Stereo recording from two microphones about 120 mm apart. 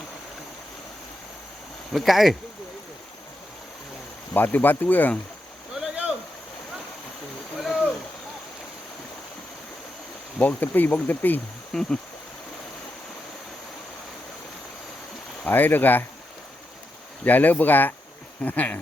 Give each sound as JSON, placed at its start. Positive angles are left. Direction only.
{"t": 1.9, "sound": "speech", "side_deg": 0}
{"t": 4.4, "sound": "speech", "side_deg": 15}
{"t": 5.7, "sound": "boat", "side_deg": -5}
{"t": 10.3, "sound": "speech", "side_deg": 15}
{"t": 11.7, "sound": "speech", "side_deg": 5}
{"t": 15.4, "sound": "speech", "side_deg": 15}
{"t": 17.2, "sound": "speech", "side_deg": 15}